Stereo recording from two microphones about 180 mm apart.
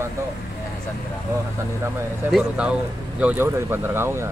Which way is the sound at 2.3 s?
5° right (ahead or behind).